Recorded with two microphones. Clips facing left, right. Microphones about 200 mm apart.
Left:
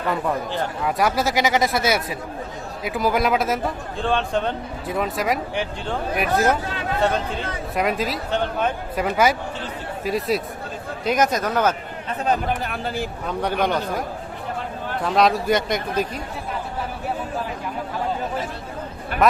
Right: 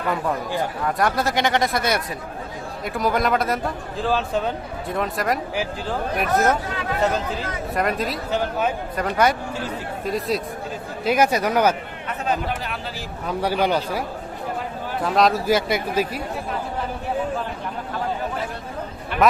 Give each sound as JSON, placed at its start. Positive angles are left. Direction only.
{"t": 0.8, "sound": "a man's voice", "side_deg": 5}
{"t": 9.0, "sound": "a man's voice", "side_deg": 5}
{"t": 12.6, "sound": "speech", "side_deg": 50}
{"t": 13.2, "sound": "a man's voice", "side_deg": -5}
{"t": 15.0, "sound": "a man's voice", "side_deg": 0}
{"t": 19.2, "sound": "a man's voice", "side_deg": 0}